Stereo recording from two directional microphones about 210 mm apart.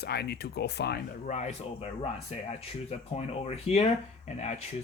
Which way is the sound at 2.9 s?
30° left (ahead or behind).